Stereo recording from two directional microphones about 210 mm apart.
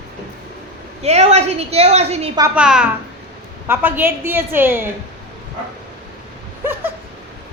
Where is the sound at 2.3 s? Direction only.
10° right (ahead or behind).